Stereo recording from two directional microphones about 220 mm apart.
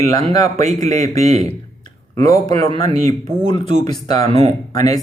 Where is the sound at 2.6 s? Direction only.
15° left (ahead or behind).